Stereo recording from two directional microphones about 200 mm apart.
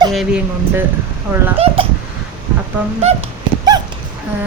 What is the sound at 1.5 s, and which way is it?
Speech, 30° right (ahead or behind).